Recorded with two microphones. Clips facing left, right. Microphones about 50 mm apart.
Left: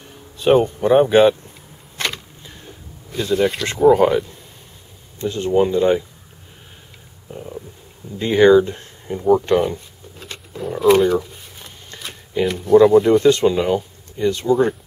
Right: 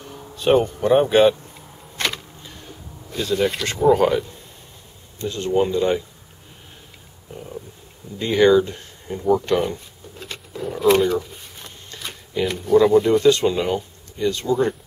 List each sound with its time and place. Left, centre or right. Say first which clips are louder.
0.1 s speech: left 2 dB; centre
2.0 s vehicle: even; centre
3.1 s speech: left 3 dB; centre
5.2 s speech: left 3 dB; left
7.2 s stomach rumble: left 2 dB; centre
8.2 s speech: left 3 dB; left
9.6 s a sound: left 3 dB; centre
11.9 s a sound: even; left
12.4 s speech: left 4 dB; centre
13.2 s speech: left 2 dB; left
13.5 s speech: left 4 dB; centre
14.1 s speech: left 3 dB; left
14.4 s speech: left 4 dB; centre